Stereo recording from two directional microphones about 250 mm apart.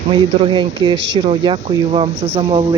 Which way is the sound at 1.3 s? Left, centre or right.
Right.